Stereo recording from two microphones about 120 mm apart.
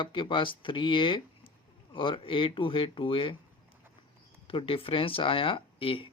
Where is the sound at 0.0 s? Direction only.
45° left (ahead or behind).